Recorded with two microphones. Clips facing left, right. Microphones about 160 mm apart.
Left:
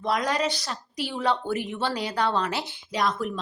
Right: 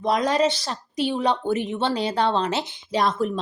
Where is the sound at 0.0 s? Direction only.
25° right (ahead or behind).